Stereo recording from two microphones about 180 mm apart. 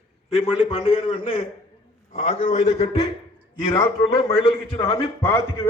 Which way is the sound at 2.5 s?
40° left (ahead or behind).